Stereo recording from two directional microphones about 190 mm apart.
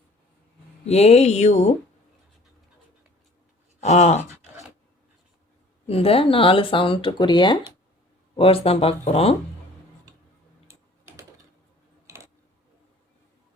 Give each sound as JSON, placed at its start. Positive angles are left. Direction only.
{"t": 0.9, "sound": "speech", "side_deg": 35}
{"t": 3.8, "sound": "speech", "side_deg": 35}
{"t": 5.9, "sound": "speech", "side_deg": 30}
{"t": 12.0, "sound": "a sound", "side_deg": -15}